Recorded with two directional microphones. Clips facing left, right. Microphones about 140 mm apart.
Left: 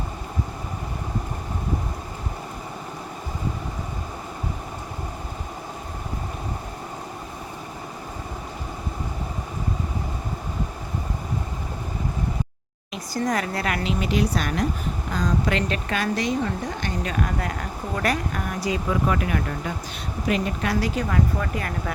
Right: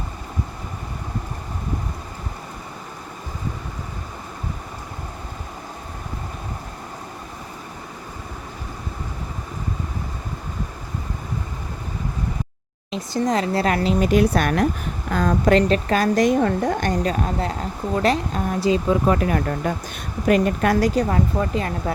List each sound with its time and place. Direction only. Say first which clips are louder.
12.9 s a woman's voice: right 4 dB; 25° right (ahead or behind); by 15.5 s 55° right (ahead or behind)
15.5 s a woman's voice: right 8 dB; 35° right (ahead or behind)